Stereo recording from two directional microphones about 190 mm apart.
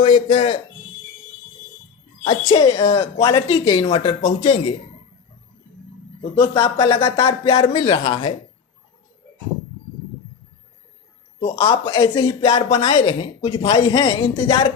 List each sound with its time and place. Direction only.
0.3 s speech: 35° left (ahead or behind)
2.2 s speech: 25° left (ahead or behind)
6.3 s speech: 25° left (ahead or behind)
11.4 s speech: 25° left (ahead or behind)